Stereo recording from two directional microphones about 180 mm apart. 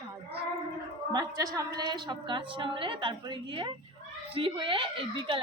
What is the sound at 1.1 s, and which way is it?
A woman's voice, 20° right (ahead or behind).